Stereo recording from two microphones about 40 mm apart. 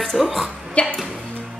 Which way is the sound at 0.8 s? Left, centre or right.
Left.